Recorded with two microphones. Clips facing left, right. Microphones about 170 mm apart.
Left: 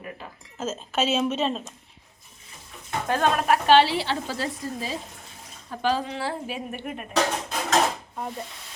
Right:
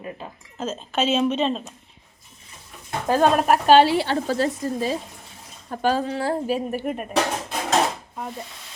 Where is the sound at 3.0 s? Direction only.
35° right (ahead or behind).